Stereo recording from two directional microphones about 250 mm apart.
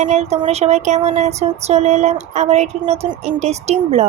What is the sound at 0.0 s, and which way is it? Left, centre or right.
Speech, right.